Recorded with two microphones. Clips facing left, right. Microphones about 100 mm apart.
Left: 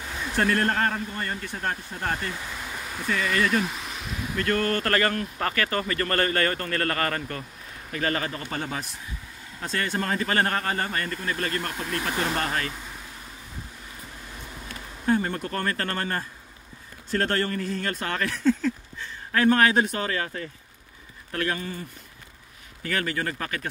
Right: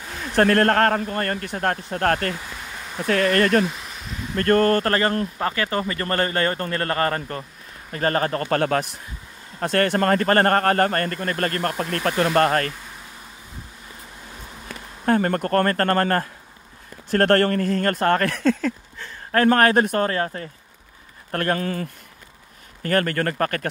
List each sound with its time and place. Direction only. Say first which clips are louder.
0.4 s speech: right 7 dB; 60° right (ahead or behind)
2.4 s a sound: even; centre (ahead or behind)
3.1 s speech: right 6 dB; 65° right (ahead or behind)
3.6 s a sound: right 3 dB; centre (ahead or behind)
4.4 s speech: right 8 dB; 45° right (ahead or behind)
15.0 s speech: right 5 dB; 60° right (ahead or behind)
18.9 s speech: right 5 dB; 50° right (ahead or behind)
21.5 s speech: right 8 dB; 75° right (ahead or behind)
22.8 s speech: right 7 dB; 50° right (ahead or behind)